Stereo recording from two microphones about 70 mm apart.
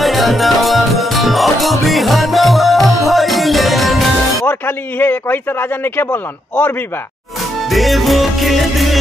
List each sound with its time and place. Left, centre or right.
0.0 s music: centre
4.5 s a man's voice: left
7.7 s music: centre